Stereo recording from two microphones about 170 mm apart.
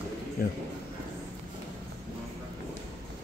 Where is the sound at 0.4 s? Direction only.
65° left (ahead or behind).